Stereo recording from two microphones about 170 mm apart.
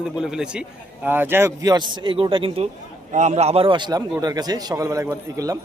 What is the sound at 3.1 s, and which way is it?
A man's voice, 45° right (ahead or behind).